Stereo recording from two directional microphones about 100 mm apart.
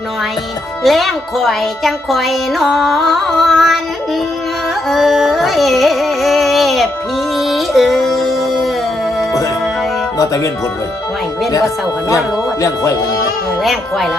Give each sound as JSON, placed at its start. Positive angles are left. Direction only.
{"t": 0.9, "sound": "speech", "side_deg": 0}
{"t": 4.9, "sound": "carnatic music", "side_deg": 0}
{"t": 7.3, "sound": "music", "side_deg": 0}
{"t": 10.2, "sound": "music", "side_deg": 35}
{"t": 13.6, "sound": "speech", "side_deg": 0}